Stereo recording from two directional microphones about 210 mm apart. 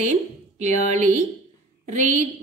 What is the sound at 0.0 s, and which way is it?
Speech, 35° right (ahead or behind).